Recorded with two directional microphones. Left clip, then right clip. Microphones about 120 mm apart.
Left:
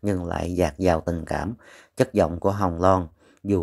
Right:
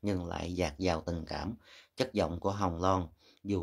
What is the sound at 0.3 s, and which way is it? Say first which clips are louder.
Speech: left 11 dB; 50° left (ahead or behind).